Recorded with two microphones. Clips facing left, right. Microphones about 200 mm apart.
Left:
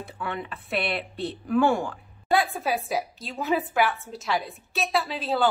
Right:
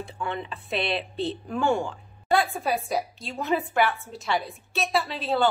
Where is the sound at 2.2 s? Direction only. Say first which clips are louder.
Even; centre (ahead or behind).